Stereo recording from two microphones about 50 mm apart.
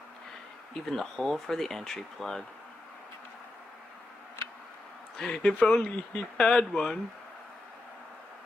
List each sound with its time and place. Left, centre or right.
0.8 s speech: centre
5.3 s speech: left